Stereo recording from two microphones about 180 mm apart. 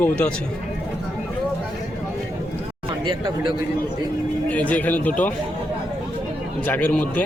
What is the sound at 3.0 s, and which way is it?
Speech, 25° right (ahead or behind).